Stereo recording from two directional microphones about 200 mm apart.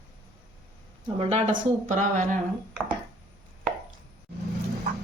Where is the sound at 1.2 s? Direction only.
35° right (ahead or behind).